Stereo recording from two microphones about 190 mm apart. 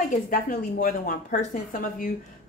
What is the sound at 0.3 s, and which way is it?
Speech, 50° left (ahead or behind).